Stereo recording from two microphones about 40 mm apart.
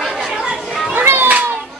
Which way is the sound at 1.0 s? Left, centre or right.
Right.